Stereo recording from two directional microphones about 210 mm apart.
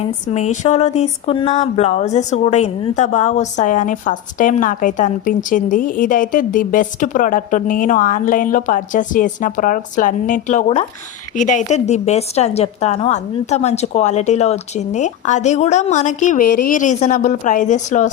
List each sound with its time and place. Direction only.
0.0 s speech: 30° left (ahead or behind)